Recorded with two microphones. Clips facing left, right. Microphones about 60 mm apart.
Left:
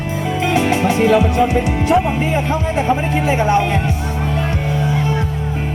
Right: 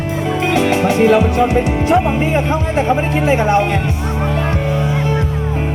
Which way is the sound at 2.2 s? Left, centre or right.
Right.